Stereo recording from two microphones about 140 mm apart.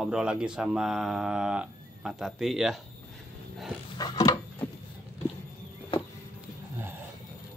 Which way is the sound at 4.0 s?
30° left (ahead or behind).